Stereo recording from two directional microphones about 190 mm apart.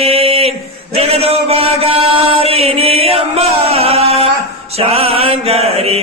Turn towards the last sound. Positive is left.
turn(degrees=-30)  # may be behind; listen again after turning